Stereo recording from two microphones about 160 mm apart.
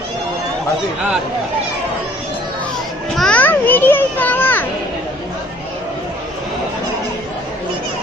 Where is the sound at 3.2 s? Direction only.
10° left (ahead or behind).